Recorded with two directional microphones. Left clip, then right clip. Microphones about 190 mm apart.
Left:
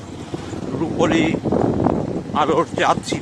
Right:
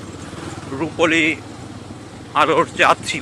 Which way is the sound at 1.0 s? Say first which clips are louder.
Right 2 dB; 20° left (ahead or behind).